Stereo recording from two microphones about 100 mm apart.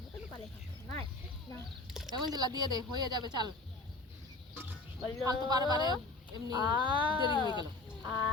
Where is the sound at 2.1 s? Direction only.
45° right (ahead or behind).